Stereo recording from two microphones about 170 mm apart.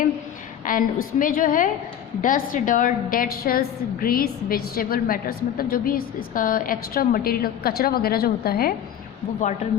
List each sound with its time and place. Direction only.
0.6 s a woman's voice: 55° left (ahead or behind)